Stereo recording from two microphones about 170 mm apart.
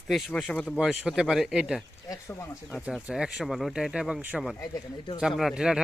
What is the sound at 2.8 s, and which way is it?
A man's voice, 5° right (ahead or behind).